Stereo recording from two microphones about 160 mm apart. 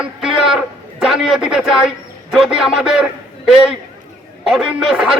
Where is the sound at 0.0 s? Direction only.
5° right (ahead or behind).